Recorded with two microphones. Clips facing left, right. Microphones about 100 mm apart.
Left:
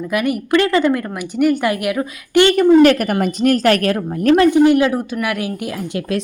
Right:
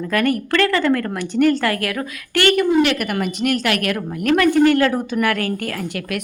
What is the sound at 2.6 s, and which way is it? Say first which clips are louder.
A woman's voice: left 6 dB; 40° left (ahead or behind).